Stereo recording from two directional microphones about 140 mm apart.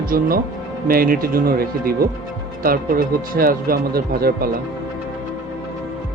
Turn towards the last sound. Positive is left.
turn(degrees=-90)